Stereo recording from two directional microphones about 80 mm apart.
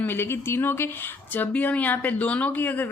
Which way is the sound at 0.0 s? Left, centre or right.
Left.